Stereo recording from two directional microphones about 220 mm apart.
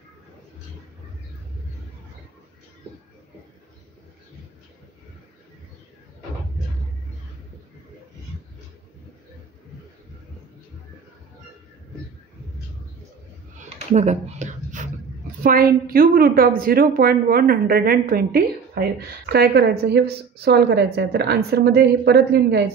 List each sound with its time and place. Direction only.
13.9 s a woman's voice: 35° right (ahead or behind); by 22.7 s 50° right (ahead or behind)